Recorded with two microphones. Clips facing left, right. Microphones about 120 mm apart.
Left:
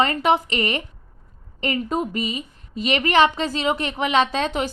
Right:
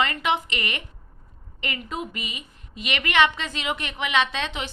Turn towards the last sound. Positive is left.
turn(degrees=40)  # may be behind; listen again after turning